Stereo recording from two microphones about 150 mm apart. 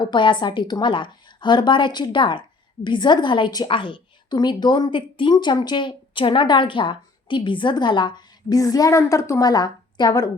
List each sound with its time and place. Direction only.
0.0 s a woman's voice: 30° left (ahead or behind)